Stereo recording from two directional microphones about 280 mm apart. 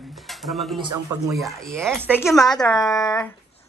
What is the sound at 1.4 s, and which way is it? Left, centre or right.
Speech, centre.